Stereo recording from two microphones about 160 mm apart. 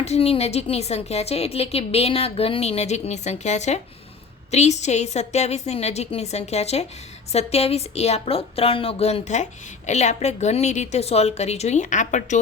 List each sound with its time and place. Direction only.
0.0 s a woman's voice: 40° left (ahead or behind)